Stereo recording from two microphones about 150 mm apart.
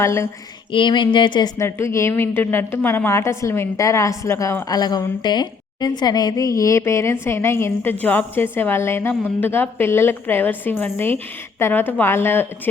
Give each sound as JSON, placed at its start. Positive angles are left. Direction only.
{"t": 0.0, "sound": "speech", "side_deg": 20}
{"t": 0.7, "sound": "speech", "side_deg": 35}
{"t": 1.5, "sound": "a woman's voice", "side_deg": 20}